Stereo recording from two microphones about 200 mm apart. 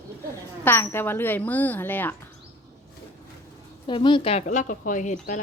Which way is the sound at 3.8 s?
25° left (ahead or behind).